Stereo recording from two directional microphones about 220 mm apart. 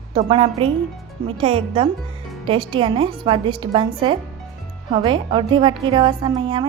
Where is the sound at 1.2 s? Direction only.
25° right (ahead or behind).